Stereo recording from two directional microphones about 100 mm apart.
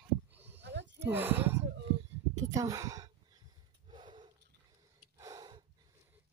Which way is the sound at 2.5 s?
35° right (ahead or behind).